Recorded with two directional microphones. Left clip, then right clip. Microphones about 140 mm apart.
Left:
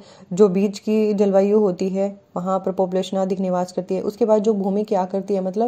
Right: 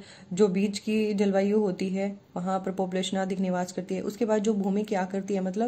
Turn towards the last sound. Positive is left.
turn(degrees=25)  # may be behind; listen again after turning